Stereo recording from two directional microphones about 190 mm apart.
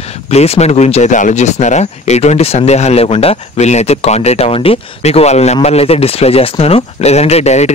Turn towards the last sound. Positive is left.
turn(degrees=35)  # may be behind; listen again after turning